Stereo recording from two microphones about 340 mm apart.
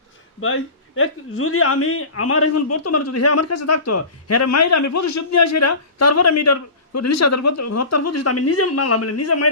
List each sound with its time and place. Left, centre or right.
0.4 s speech: left